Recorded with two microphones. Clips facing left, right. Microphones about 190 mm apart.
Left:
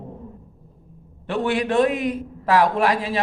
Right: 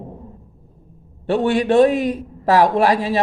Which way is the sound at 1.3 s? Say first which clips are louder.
Right 5 dB; 35° right (ahead or behind).